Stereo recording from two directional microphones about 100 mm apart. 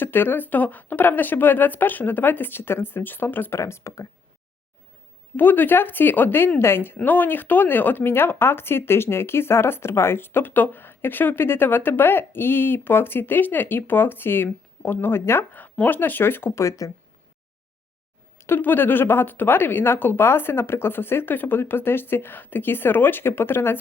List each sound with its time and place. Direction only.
0.0 s speech: 20° left (ahead or behind)
5.4 s speech: 20° left (ahead or behind)
18.3 s speech: 25° left (ahead or behind)